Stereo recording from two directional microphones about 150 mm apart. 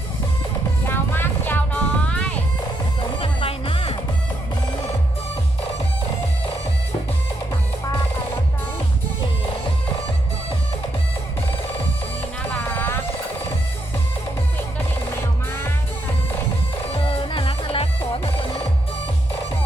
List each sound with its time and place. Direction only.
0.9 s music: 15° left (ahead or behind)
3.2 s music: 40° left (ahead or behind)
12.7 s a sound: 15° left (ahead or behind)
16.9 s music: 40° left (ahead or behind)